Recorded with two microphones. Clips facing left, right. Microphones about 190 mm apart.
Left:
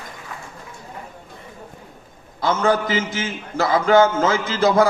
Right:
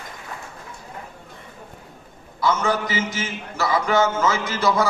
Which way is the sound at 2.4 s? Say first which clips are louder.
Left 3 dB; 55° left (ahead or behind).